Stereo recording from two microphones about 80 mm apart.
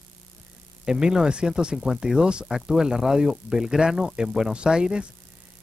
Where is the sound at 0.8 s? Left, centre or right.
Centre.